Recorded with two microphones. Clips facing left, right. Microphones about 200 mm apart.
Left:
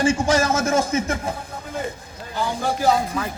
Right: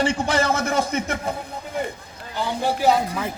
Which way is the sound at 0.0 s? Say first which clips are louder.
Left 2 dB; 60° right (ahead or behind).